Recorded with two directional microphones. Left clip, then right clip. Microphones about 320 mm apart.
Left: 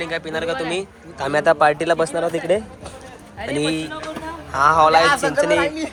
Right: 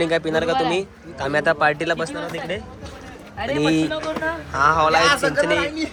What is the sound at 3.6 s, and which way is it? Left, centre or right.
A man's voice, centre.